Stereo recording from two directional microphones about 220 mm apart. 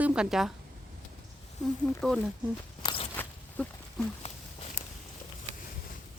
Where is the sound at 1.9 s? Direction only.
Centre (ahead or behind).